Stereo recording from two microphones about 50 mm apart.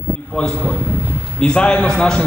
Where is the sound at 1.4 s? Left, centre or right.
Left.